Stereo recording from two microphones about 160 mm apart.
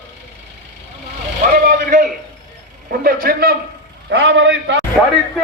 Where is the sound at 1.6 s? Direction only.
55° right (ahead or behind).